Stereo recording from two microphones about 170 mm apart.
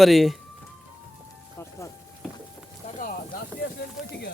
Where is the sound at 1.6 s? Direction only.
15° left (ahead or behind).